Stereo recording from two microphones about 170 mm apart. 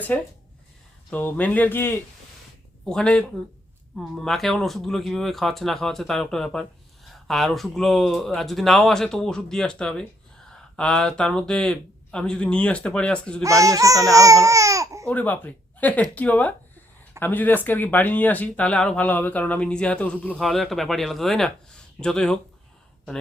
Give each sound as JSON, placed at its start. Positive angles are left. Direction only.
{"t": 0.1, "sound": "speech", "side_deg": 10}
{"t": 2.9, "sound": "speech", "side_deg": 5}
{"t": 13.4, "sound": "speech", "side_deg": -20}
{"t": 15.0, "sound": "speech", "side_deg": 10}